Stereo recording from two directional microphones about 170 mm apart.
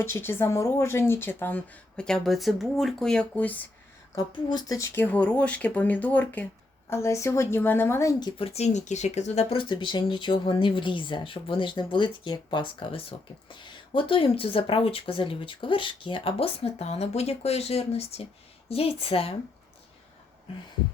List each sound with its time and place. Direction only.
0.0 s speech: 15° left (ahead or behind)
4.1 s speech: 25° left (ahead or behind)
8.4 s speech: 35° left (ahead or behind)